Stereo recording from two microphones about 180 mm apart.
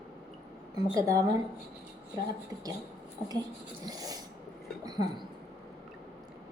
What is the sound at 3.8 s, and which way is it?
Speech, 20° right (ahead or behind).